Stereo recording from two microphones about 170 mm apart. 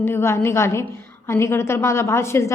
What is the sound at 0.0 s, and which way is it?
A woman's voice, 15° left (ahead or behind).